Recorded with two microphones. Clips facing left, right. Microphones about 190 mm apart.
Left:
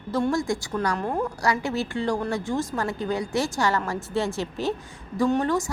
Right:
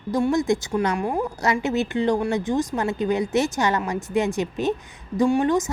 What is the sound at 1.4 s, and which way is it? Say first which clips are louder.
Speech: right 5 dB; 20° right (ahead or behind).